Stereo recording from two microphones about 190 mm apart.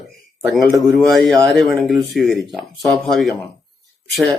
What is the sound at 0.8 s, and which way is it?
Speech, centre (ahead or behind).